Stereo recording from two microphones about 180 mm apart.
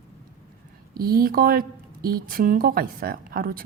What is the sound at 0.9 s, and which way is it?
A woman's voice, 55° right (ahead or behind).